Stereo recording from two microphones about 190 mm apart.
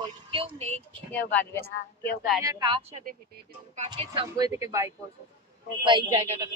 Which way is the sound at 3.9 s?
25° right (ahead or behind).